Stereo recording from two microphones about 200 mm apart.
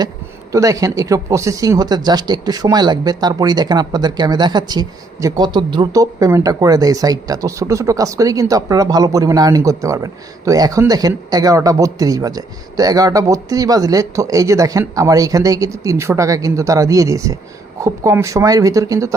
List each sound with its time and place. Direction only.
0.5 s speech: 15° right (ahead or behind)